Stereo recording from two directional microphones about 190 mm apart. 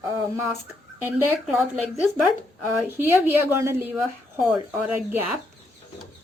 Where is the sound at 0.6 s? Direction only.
10° right (ahead or behind).